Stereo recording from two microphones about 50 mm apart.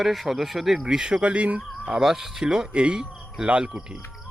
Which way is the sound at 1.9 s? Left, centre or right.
Centre.